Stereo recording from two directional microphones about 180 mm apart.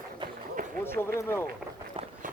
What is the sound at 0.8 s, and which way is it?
Speech, 10° left (ahead or behind).